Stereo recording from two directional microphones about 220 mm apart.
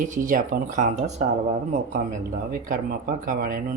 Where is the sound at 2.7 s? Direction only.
40° right (ahead or behind).